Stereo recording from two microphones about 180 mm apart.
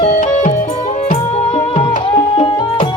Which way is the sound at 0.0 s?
45° left (ahead or behind).